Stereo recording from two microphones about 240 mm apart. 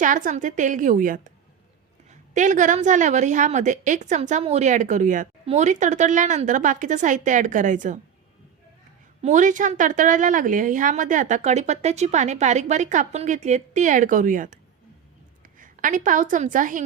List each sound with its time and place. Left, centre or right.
0.0 s a woman's voice: right
9.2 s a woman's voice: right